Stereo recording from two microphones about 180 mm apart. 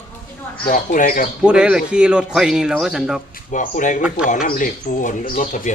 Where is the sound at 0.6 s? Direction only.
45° left (ahead or behind).